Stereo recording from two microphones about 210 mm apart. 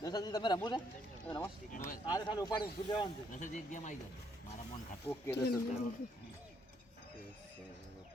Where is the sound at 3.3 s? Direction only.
35° left (ahead or behind).